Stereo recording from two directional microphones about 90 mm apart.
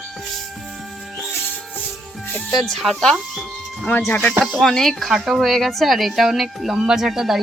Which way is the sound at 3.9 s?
20° left (ahead or behind).